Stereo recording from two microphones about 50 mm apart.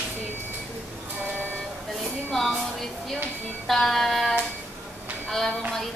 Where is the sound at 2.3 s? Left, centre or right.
Centre.